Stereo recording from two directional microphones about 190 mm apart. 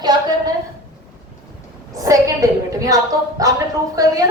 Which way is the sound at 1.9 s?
15° right (ahead or behind).